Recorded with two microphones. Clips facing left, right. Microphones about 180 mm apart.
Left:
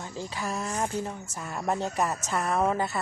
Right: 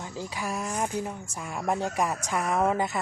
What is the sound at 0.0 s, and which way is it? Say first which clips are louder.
Speech: even; 10° right (ahead or behind).